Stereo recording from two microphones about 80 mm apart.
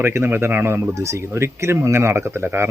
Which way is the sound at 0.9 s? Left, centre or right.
Right.